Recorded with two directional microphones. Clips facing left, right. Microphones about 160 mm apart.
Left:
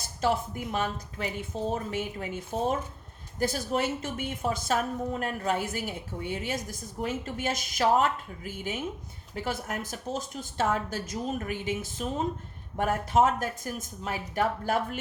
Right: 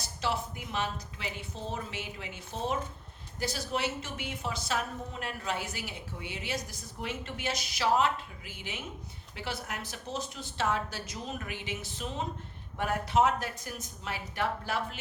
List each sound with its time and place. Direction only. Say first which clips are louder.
0.0 s a woman's voice: left 6 dB; 45° left (ahead or behind)